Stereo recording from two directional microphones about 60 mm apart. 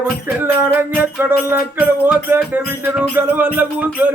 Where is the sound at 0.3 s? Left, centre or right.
Right.